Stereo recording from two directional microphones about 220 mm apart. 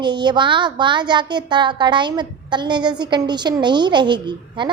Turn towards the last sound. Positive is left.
turn(degrees=-20)  # may be behind; listen again after turning